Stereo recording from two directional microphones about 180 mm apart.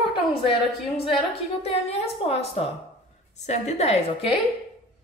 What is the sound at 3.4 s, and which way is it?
Speech, 40° left (ahead or behind).